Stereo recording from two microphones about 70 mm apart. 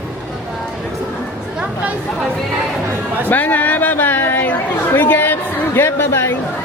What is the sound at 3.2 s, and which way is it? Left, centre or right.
A woman's voice, left.